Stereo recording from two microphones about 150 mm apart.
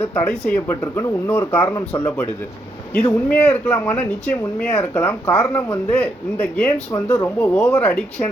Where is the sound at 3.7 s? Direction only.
20° left (ahead or behind).